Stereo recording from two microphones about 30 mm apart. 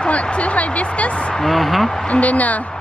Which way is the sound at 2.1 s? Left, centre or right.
Left.